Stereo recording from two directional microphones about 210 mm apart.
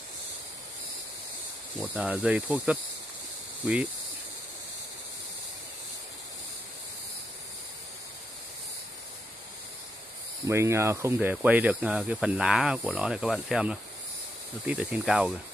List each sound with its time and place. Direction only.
1.8 s speech: 5° right (ahead or behind)
10.4 s speech: 15° right (ahead or behind)